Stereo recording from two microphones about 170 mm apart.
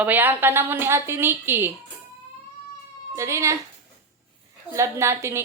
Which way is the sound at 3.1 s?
15° right (ahead or behind).